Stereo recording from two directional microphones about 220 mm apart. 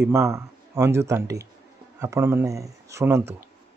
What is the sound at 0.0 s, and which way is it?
Speech, 10° right (ahead or behind).